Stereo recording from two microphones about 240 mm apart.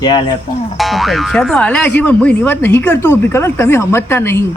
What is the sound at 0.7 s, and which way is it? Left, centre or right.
Speech, centre.